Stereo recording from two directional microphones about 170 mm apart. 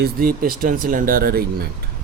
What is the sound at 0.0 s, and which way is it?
Speech, 60° right (ahead or behind).